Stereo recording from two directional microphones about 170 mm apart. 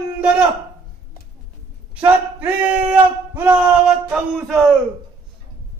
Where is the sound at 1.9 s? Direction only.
10° right (ahead or behind).